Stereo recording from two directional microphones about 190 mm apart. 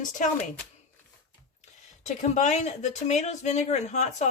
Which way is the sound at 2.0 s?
40° left (ahead or behind).